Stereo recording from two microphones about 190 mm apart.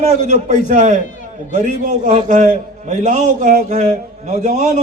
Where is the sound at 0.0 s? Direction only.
40° right (ahead or behind).